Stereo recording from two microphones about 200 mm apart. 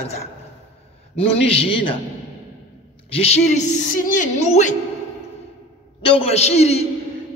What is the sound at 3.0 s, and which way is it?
A man's voice, 30° left (ahead or behind).